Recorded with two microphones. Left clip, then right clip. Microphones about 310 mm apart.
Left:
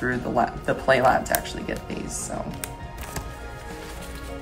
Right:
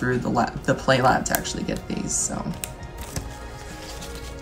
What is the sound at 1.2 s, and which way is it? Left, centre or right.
Speech, centre.